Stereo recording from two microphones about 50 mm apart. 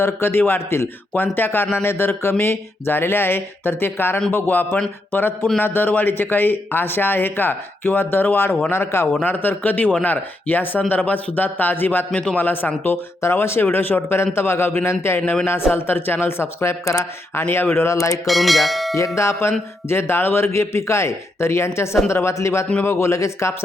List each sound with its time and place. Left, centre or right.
0.0 s speech: left
8.7 s speech: left
9.2 s speech: left
13.2 s speech: left
14.3 s speech: left
15.7 s speech: left
17.3 s speech: left
18.3 s speech: centre
18.9 s speech: left
22.1 s speech: left
22.8 s speech: left